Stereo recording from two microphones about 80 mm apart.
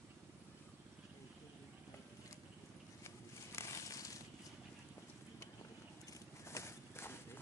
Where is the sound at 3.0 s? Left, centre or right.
Left.